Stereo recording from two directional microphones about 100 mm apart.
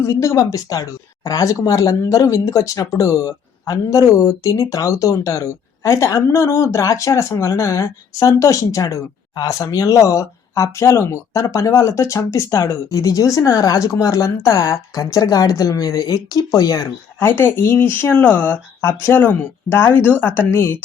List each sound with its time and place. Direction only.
0.0 s speech: 30° left (ahead or behind)
17.2 s speech: 20° left (ahead or behind)